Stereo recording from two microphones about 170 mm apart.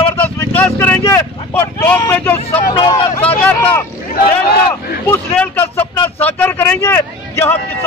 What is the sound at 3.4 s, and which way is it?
Speech, 10° left (ahead or behind).